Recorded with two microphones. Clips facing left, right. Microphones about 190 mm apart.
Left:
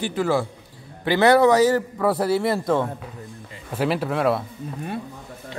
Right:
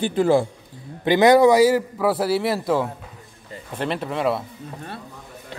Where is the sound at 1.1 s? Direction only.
15° right (ahead or behind).